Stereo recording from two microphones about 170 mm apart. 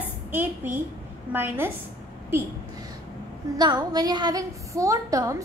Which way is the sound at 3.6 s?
25° right (ahead or behind).